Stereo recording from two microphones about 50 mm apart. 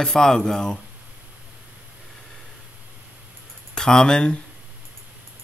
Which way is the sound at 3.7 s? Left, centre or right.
Centre.